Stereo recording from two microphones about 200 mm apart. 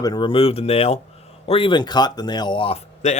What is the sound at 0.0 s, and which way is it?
Speech, 20° left (ahead or behind).